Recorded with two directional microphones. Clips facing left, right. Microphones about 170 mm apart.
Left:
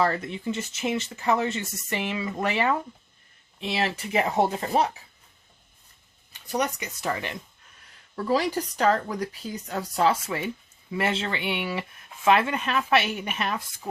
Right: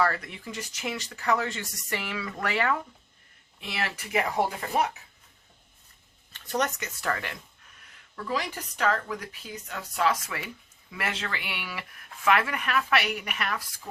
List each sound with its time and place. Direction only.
0.0 s speech: 25° left (ahead or behind)
6.3 s a sound: 10° left (ahead or behind)
6.7 s speech: 15° left (ahead or behind)
8.1 s speech: 35° left (ahead or behind)